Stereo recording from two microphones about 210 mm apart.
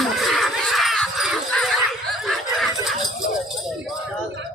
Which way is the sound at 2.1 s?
Centre (ahead or behind).